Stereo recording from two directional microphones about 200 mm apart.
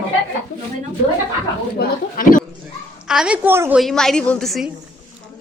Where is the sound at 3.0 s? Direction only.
5° right (ahead or behind).